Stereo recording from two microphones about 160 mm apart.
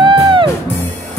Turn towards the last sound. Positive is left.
turn(degrees=-30)  # may be behind; listen again after turning